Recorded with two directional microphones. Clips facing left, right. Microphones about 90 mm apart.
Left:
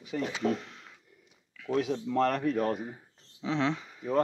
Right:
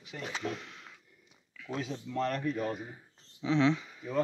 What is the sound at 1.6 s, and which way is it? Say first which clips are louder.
Speech: left 8 dB; 55° left (ahead or behind).